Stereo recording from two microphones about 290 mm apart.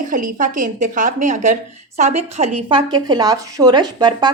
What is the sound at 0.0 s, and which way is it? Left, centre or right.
A woman's voice, right.